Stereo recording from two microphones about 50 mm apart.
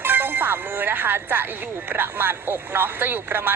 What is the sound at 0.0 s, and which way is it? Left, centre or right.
Music, right.